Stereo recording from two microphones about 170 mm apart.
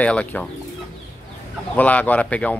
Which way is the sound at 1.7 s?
10° left (ahead or behind).